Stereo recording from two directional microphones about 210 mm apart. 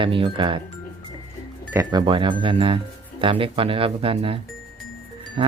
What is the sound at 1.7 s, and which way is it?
Speech, 15° right (ahead or behind).